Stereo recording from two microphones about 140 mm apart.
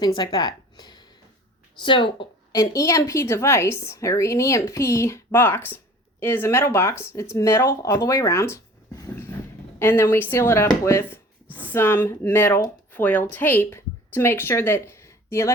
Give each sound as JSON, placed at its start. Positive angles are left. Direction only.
{"t": 0.0, "sound": "a woman's voice", "side_deg": 30}